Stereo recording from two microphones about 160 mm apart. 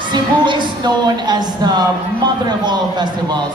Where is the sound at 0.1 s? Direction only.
30° right (ahead or behind).